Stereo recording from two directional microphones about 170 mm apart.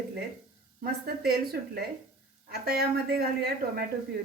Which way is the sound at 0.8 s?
65° right (ahead or behind).